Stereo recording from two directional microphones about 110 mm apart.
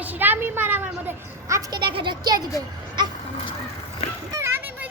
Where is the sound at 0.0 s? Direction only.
15° right (ahead or behind).